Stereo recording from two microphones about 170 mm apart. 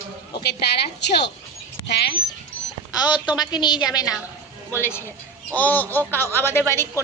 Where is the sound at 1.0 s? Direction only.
85° left.